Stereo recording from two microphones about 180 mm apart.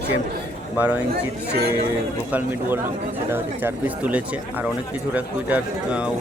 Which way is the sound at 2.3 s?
10° right (ahead or behind).